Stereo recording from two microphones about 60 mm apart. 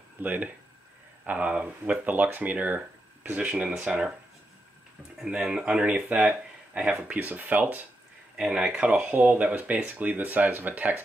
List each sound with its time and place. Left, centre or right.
0.2 s speech: right
5.2 s speech: centre
5.9 s speech: right
8.4 s speech: centre